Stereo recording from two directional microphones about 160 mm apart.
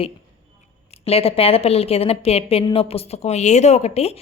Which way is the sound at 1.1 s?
35° left (ahead or behind).